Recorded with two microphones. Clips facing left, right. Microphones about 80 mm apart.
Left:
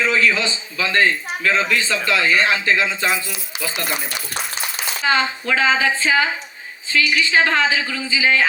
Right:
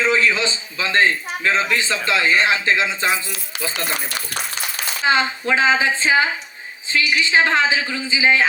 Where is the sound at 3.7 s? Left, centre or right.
Right.